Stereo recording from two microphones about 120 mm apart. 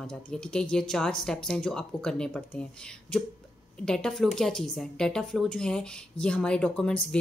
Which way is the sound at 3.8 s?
5° left (ahead or behind).